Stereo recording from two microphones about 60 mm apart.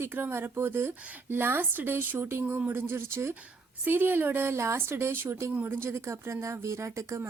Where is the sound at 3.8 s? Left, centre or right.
Right.